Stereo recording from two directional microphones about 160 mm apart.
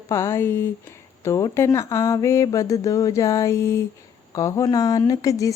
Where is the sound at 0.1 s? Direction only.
15° left (ahead or behind).